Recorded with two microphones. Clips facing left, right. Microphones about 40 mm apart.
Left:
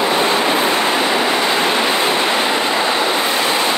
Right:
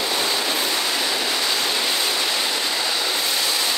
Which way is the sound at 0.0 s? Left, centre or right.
Left.